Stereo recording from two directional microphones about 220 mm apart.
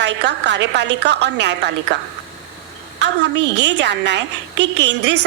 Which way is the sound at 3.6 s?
55° right (ahead or behind).